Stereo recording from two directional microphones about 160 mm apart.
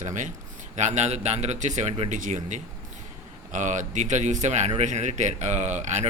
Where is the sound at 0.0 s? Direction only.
50° right (ahead or behind).